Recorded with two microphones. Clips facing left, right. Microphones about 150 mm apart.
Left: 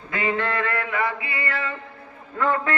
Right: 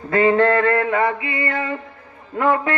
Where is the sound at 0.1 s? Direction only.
35° right (ahead or behind); by 1.7 s 20° right (ahead or behind).